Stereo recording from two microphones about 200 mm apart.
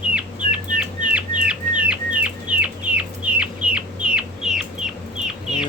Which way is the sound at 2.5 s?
5° right (ahead or behind).